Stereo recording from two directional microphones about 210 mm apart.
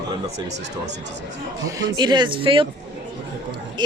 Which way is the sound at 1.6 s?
15° right (ahead or behind).